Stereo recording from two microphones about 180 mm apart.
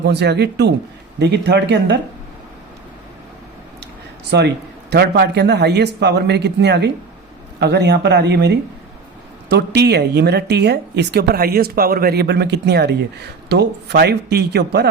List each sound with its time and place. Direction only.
0.0 s speech: 70° right (ahead or behind)
4.3 s speech: 70° right (ahead or behind)